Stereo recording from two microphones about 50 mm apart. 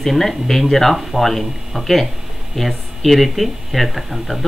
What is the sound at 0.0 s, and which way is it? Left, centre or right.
Speech, centre.